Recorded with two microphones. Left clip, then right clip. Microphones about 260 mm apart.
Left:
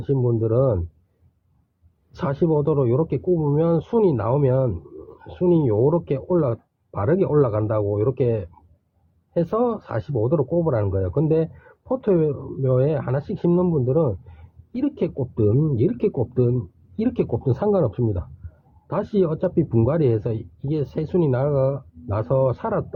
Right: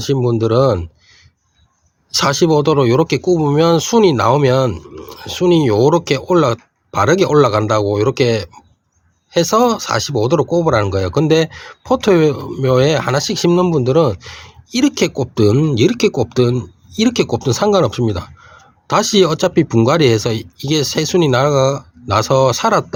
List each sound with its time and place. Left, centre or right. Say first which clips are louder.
0.0 s speech: right 7 dB; right
2.1 s speech: right 9 dB; right
10.5 s speech: right 8 dB; right